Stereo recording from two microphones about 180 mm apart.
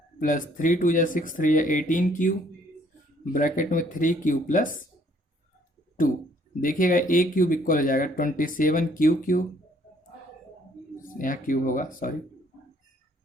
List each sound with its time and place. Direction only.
0.2 s speech: 45° left (ahead or behind)
3.3 s speech: 45° left (ahead or behind)
6.6 s speech: 50° left (ahead or behind)
11.0 s speech: 50° left (ahead or behind)